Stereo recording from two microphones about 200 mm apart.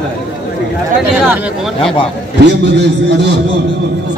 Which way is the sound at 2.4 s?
60° right (ahead or behind).